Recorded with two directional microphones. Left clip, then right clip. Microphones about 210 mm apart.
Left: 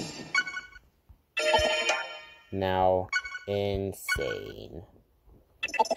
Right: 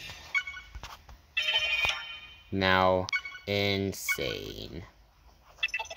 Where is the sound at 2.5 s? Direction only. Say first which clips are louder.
Right 1 dB; 10° left (ahead or behind).